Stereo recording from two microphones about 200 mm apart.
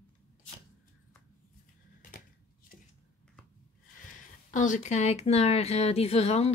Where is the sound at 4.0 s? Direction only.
40° left (ahead or behind).